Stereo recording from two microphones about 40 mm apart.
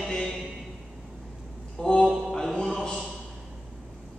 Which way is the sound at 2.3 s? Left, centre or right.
Centre.